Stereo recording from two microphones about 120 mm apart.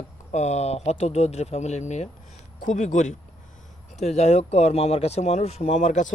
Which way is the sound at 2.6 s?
90° left.